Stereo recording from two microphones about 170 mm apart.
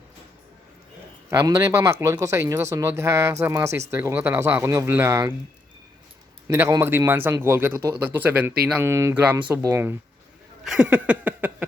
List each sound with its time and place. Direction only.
1.3 s speech: 20° right (ahead or behind)
6.5 s speech: 15° right (ahead or behind)
10.6 s speech: 5° right (ahead or behind)